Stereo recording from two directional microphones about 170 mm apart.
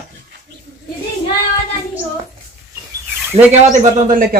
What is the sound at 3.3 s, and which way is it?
Speech, 40° right (ahead or behind).